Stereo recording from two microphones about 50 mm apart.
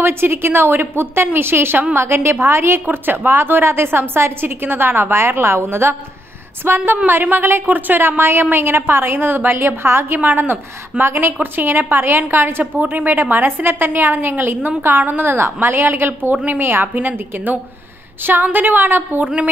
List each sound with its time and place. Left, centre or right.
0.0 s a woman's voice: right
8.2 s a woman's voice: right
10.1 s a woman's voice: right